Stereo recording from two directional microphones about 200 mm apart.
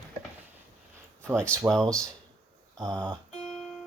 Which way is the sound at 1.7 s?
5° left (ahead or behind).